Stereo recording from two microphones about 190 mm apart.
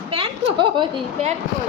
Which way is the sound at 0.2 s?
25° right (ahead or behind).